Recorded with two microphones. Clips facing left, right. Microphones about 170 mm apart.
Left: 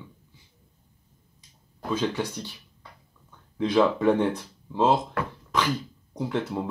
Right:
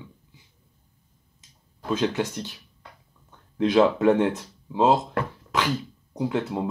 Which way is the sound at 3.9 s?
5° right (ahead or behind).